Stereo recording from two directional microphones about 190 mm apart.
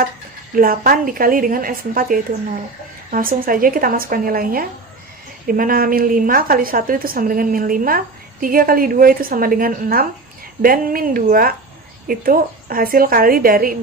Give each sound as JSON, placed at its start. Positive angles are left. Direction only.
{"t": 0.6, "sound": "a woman's voice", "side_deg": -50}